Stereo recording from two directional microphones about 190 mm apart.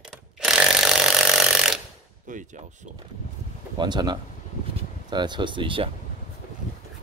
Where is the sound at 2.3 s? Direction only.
40° right (ahead or behind).